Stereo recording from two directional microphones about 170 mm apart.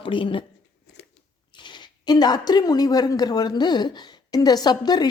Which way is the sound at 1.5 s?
25° left (ahead or behind).